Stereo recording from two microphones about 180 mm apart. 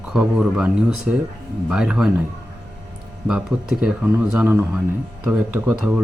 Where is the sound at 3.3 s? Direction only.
5° right (ahead or behind).